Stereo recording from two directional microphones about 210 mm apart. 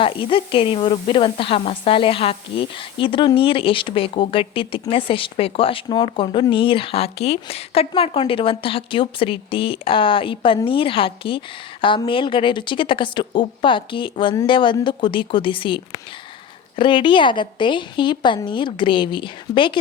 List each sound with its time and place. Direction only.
0.0 s a woman's voice: 25° left (ahead or behind)